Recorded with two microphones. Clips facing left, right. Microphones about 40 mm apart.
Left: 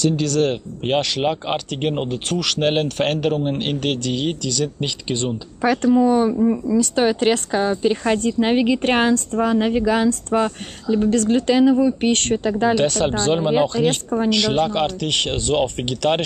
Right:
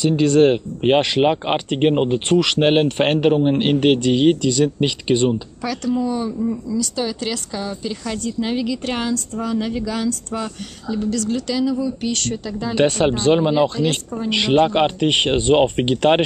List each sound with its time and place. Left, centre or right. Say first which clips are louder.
0.0 s speech: right 5 dB; right
5.6 s speech: left 10 dB; left
12.7 s speech: right 2 dB; centre
13.7 s speech: left 3 dB; left
14.3 s speech: right 6 dB; right